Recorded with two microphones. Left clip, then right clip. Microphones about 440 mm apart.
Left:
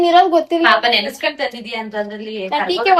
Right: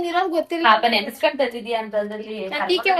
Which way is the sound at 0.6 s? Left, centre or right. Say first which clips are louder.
Left 1 dB; centre.